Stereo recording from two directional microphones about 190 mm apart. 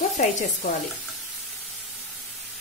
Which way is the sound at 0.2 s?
40° left (ahead or behind).